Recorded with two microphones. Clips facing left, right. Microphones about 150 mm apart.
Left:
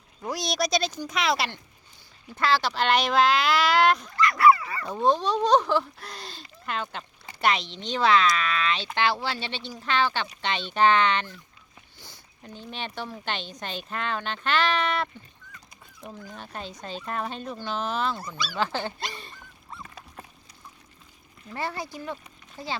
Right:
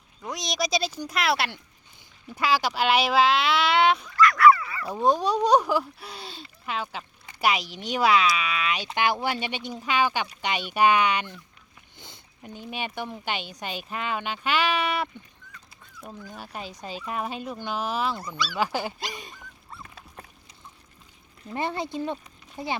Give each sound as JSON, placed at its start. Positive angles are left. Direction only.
{"t": 0.2, "sound": "speech", "side_deg": 5}
{"t": 4.2, "sound": "dog", "side_deg": 25}
{"t": 4.9, "sound": "speech", "side_deg": -10}
{"t": 11.9, "sound": "a sound", "side_deg": -20}
{"t": 12.5, "sound": "speech", "side_deg": -10}
{"t": 21.5, "sound": "speech", "side_deg": -20}